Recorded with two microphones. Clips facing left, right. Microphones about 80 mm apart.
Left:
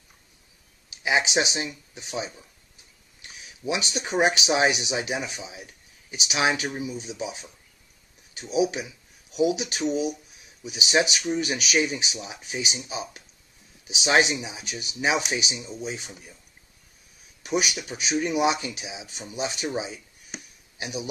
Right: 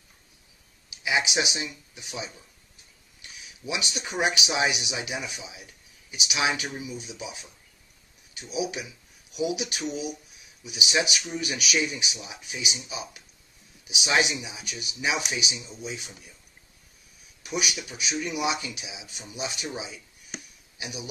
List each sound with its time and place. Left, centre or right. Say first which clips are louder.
1.0 s speech: left 3 dB; left
3.6 s speech: left 4 dB; left
17.4 s a sound: left 5 dB; left
17.7 s speech: left 5 dB; left